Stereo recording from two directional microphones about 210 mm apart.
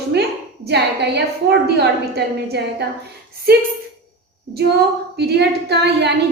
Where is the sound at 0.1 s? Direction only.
55° right (ahead or behind).